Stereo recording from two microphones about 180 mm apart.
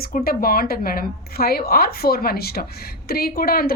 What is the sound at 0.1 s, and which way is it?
A woman's voice, 55° left (ahead or behind).